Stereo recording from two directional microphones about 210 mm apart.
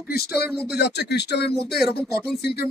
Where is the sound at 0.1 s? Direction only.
50° left (ahead or behind).